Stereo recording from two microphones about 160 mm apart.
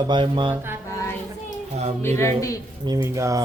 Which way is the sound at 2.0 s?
15° left (ahead or behind).